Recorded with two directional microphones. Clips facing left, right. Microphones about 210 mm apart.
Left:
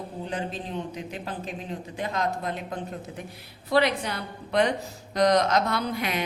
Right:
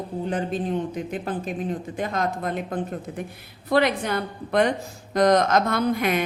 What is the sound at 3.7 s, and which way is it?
Speech, 50° right (ahead or behind).